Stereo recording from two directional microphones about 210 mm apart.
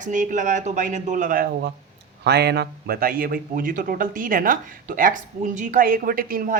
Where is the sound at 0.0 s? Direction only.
40° right (ahead or behind).